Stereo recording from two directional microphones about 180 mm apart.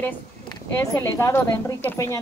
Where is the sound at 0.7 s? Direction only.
15° left (ahead or behind).